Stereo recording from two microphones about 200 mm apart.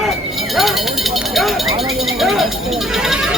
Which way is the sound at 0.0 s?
Centre (ahead or behind).